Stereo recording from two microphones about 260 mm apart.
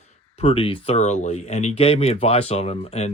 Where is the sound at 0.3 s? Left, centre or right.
Left.